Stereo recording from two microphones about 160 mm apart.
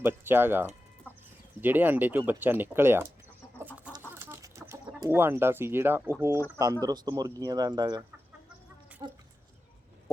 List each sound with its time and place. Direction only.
0.0 s speech: 15° right (ahead or behind)
1.1 s chicken: 10° right (ahead or behind)
1.6 s speech: 10° right (ahead or behind)
4.1 s chicken: 15° right (ahead or behind)
4.9 s speech: 15° right (ahead or behind)